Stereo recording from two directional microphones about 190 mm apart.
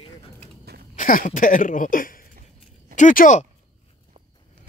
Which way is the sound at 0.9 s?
45° left (ahead or behind).